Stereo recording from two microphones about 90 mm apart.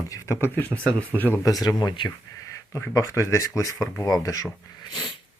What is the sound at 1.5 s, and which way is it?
Speech, 45° left (ahead or behind).